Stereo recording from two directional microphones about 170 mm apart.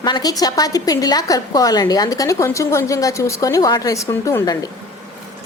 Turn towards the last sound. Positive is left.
turn(degrees=20)  # may be behind; listen again after turning